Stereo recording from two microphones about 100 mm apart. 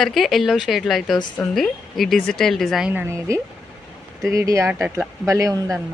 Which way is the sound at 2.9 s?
30° right (ahead or behind).